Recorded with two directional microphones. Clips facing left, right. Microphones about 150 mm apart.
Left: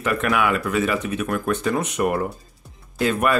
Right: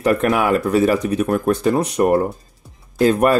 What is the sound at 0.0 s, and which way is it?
Speech, 35° right (ahead or behind).